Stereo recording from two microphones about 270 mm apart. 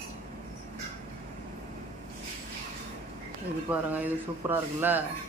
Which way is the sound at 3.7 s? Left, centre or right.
Centre.